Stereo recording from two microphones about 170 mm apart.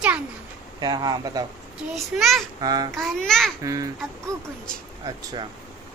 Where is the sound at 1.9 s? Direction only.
Centre (ahead or behind).